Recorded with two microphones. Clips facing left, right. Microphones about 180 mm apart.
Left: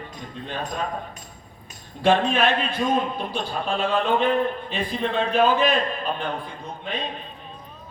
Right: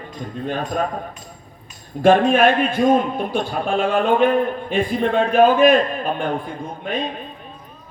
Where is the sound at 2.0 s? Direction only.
50° right (ahead or behind).